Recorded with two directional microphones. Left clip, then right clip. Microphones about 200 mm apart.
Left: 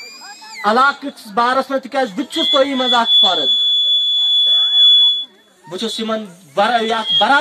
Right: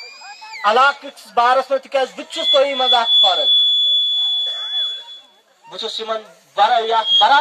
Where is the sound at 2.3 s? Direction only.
20° left (ahead or behind).